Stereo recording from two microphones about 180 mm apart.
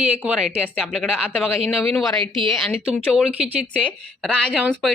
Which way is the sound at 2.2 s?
30° right (ahead or behind).